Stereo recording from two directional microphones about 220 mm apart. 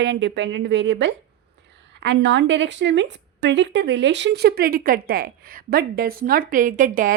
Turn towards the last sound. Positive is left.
turn(degrees=-40)  # may be behind; listen again after turning